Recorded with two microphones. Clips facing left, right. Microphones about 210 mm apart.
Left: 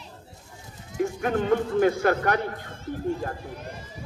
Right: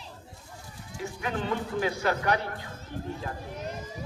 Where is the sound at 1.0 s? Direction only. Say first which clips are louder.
Left 8 dB; 50° left (ahead or behind).